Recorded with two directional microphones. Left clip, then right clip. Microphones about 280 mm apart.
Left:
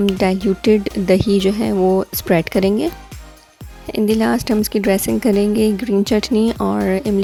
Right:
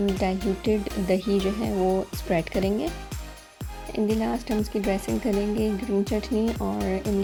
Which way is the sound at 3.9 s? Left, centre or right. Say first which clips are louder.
Left 9 dB; left.